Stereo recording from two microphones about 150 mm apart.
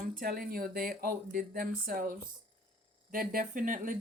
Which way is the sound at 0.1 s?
75° right (ahead or behind).